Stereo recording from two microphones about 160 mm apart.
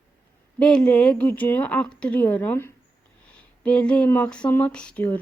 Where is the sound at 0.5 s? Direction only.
5° left (ahead or behind).